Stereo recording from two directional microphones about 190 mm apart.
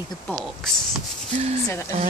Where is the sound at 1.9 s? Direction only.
35° right (ahead or behind).